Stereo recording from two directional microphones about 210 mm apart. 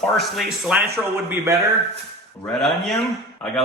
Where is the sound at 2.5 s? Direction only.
Centre (ahead or behind).